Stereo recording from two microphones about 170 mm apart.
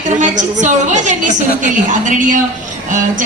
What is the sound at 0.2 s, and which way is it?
A woman's voice, 45° right (ahead or behind).